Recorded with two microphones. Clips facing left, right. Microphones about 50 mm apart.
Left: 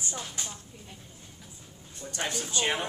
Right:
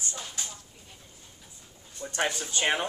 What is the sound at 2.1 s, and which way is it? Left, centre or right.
Speech, right.